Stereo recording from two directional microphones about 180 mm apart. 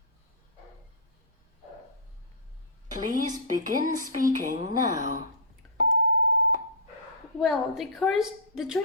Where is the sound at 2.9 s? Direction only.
50° right (ahead or behind).